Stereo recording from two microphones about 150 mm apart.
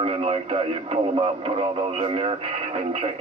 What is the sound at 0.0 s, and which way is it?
Speech, 40° right (ahead or behind).